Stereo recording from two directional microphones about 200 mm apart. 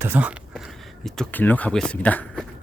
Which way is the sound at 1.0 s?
5° left (ahead or behind).